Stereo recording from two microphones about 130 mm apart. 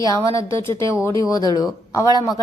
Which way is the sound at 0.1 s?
25° left (ahead or behind).